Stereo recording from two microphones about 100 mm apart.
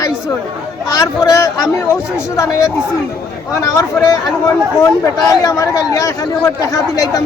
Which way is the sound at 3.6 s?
35° left (ahead or behind).